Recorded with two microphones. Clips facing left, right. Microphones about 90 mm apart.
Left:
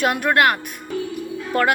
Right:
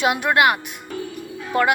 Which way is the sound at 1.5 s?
10° right (ahead or behind).